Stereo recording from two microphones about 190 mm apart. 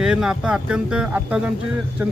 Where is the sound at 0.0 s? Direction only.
5° right (ahead or behind).